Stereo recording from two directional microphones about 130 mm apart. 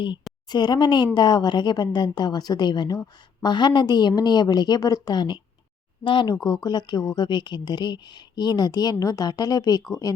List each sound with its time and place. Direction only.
0.4 s speech: 35° left (ahead or behind)